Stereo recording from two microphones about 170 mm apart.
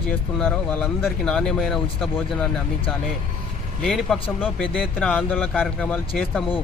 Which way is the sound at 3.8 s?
5° left (ahead or behind).